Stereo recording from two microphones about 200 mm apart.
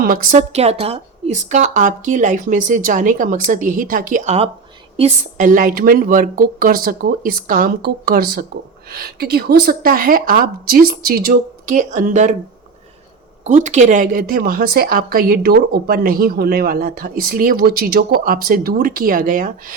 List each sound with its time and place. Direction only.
0.0 s a woman's voice: 45° right (ahead or behind)
13.4 s a woman's voice: 35° right (ahead or behind)